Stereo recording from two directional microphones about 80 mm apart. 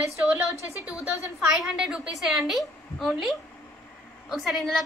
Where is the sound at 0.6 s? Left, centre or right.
Left.